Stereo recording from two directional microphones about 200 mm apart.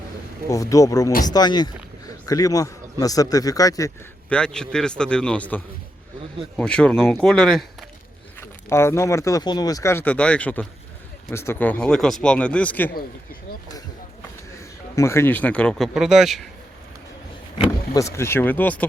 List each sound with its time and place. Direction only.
0.5 s speech: 15° left (ahead or behind)
4.3 s speech: 5° left (ahead or behind)
14.9 s speech: 15° left (ahead or behind); by 16.4 s centre (ahead or behind)
17.6 s speech: 15° left (ahead or behind)